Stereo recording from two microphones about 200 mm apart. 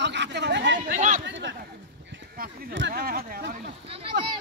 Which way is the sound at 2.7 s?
55° right (ahead or behind).